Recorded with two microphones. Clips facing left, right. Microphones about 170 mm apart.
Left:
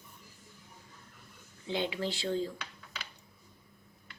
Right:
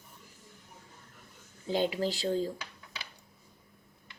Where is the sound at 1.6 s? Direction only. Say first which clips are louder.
Right 4 dB; 40° right (ahead or behind).